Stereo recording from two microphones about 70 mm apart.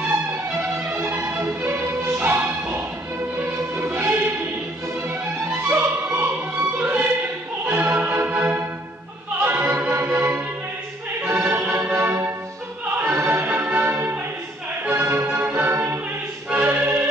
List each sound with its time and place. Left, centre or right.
0.3 s music: right